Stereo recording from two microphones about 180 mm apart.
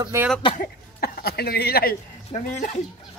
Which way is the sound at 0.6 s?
55° left (ahead or behind).